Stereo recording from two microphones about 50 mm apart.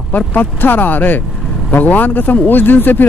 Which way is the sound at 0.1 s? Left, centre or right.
Left.